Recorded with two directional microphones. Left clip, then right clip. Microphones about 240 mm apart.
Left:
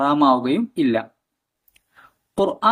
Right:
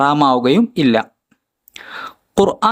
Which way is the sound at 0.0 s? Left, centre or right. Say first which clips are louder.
Right 4 dB; right.